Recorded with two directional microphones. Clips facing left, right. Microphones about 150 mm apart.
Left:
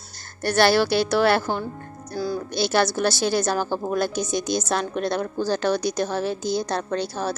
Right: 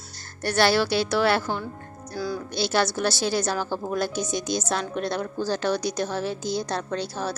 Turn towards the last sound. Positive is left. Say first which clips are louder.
# left 3 dB
turn(degrees=55)  # may be behind; listen again after turning